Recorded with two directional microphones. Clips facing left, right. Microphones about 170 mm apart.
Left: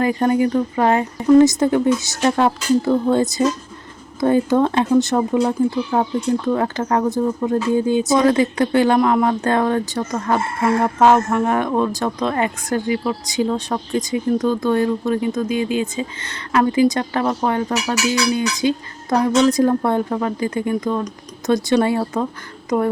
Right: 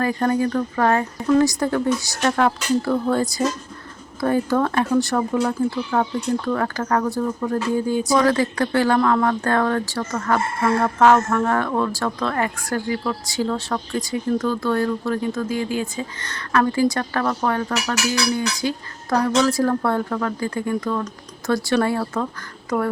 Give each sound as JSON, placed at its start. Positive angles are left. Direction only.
{"t": 0.0, "sound": "speech", "side_deg": 15}